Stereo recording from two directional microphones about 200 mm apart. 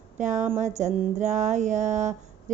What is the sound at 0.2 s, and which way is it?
Speech, 35° right (ahead or behind).